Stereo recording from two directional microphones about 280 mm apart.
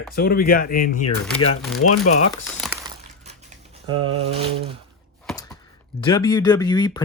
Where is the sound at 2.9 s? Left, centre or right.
Right.